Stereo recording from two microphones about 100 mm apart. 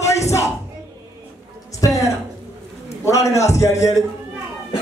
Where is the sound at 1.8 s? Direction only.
30° left (ahead or behind).